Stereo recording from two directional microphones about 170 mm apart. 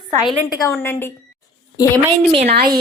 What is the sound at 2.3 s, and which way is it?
Speech, 35° right (ahead or behind).